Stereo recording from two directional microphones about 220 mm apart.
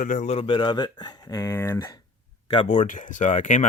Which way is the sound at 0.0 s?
35° left (ahead or behind).